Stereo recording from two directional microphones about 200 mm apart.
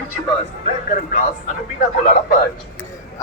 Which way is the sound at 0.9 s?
40° left (ahead or behind).